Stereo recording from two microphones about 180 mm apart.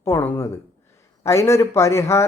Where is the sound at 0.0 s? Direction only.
15° left (ahead or behind).